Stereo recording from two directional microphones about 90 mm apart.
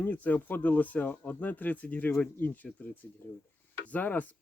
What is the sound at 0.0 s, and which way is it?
Speech, 20° left (ahead or behind).